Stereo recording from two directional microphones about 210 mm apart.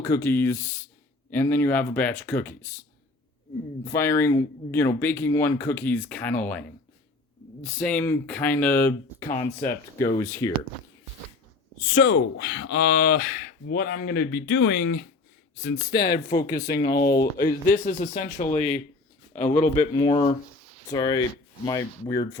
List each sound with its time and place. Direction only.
0.0 s speech: 15° left (ahead or behind)
3.8 s speech: 15° left (ahead or behind)
12.0 s a man's voice: 60° left (ahead or behind); by 19.9 s 35° left (ahead or behind)
20.0 s speech: 25° left (ahead or behind)